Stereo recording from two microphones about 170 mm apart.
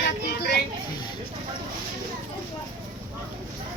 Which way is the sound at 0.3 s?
70° left (ahead or behind).